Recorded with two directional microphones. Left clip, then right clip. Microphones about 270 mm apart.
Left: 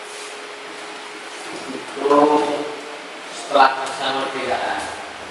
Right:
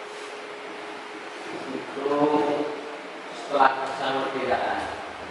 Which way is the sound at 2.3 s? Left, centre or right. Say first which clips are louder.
Left 5 dB; right.